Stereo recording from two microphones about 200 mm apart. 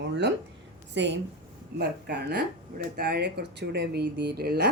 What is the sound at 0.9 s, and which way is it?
A woman's voice, 60° right (ahead or behind).